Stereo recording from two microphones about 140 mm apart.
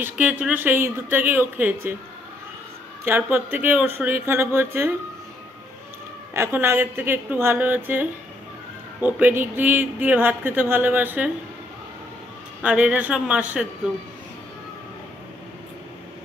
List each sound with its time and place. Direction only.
0.0 s speech: 10° right (ahead or behind)
3.1 s speech: 15° right (ahead or behind)
6.3 s speech: 20° right (ahead or behind)
12.6 s speech: 10° right (ahead or behind)